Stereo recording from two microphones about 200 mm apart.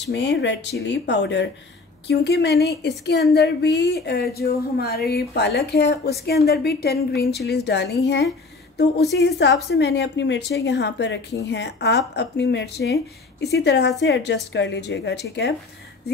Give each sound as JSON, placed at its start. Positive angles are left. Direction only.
{"t": 0.0, "sound": "a woman's voice", "side_deg": 60}